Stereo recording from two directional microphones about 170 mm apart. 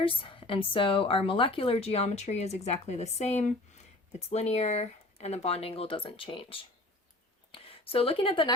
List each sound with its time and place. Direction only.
0.0 s speech: 30° left (ahead or behind)